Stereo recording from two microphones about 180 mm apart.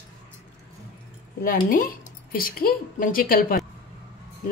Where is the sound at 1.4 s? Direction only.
55° left (ahead or behind).